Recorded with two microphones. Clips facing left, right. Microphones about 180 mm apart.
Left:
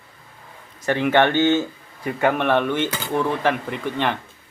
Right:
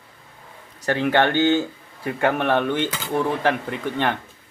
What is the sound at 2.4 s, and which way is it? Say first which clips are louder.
Speech: left 1 dB; 45° right (ahead or behind).